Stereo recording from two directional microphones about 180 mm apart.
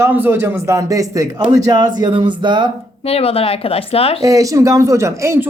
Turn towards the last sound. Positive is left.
turn(degrees=-15)  # may be behind; listen again after turning